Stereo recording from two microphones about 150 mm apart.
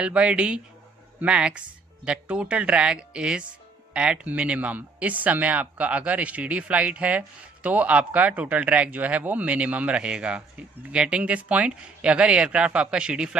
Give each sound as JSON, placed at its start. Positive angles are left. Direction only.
{"t": 0.0, "sound": "speech", "side_deg": -5}